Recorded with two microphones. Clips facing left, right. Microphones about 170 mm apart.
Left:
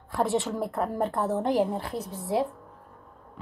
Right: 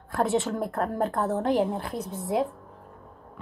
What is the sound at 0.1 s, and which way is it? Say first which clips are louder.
Speech: right 1 dB; centre (ahead or behind).